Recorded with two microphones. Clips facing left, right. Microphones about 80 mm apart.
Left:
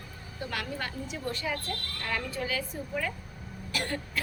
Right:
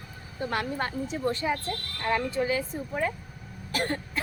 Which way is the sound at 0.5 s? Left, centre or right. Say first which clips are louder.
Right 6 dB; right.